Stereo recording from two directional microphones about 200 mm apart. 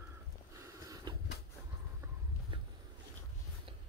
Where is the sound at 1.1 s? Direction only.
20° right (ahead or behind).